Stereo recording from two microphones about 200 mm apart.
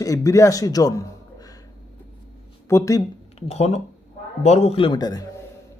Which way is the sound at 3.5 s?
30° left (ahead or behind).